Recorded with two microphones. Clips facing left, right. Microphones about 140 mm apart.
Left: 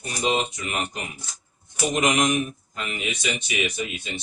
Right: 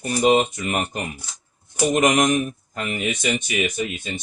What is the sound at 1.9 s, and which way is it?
Speech, 55° right (ahead or behind).